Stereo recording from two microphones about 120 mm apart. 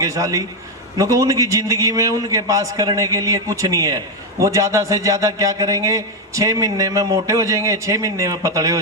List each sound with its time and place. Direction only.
0.0 s a man's voice: 30° right (ahead or behind)